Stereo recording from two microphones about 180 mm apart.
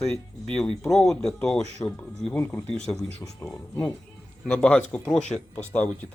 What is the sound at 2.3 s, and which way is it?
Speech, 15° left (ahead or behind).